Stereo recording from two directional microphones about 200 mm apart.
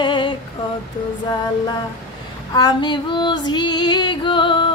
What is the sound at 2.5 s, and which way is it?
Female singing, 20° left (ahead or behind).